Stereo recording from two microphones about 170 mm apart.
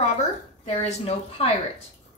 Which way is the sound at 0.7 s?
40° left (ahead or behind).